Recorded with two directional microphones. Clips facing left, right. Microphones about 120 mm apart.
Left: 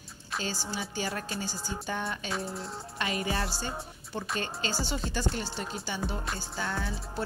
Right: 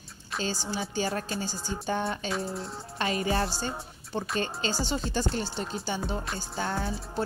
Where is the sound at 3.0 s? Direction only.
30° right (ahead or behind).